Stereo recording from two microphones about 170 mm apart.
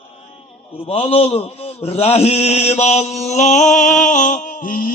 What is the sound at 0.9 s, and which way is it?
A man's voice, 35° left (ahead or behind).